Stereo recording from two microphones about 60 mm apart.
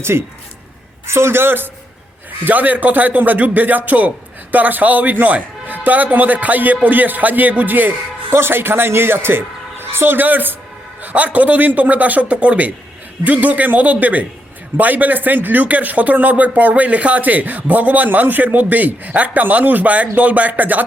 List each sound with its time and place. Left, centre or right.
0.0 s a man's voice: right
2.4 s a man's voice: right